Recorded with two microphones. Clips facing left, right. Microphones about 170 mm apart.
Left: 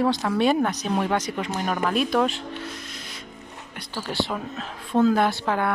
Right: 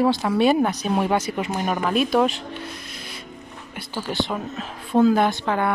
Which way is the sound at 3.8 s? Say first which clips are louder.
Right 2 dB; centre (ahead or behind).